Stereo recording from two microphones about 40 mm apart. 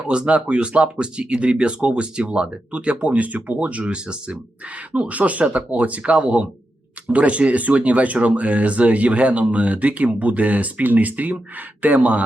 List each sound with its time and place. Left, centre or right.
0.1 s speech: right
4.9 s speech: right